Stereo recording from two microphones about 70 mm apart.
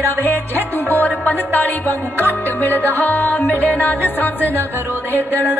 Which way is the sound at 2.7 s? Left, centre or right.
Right.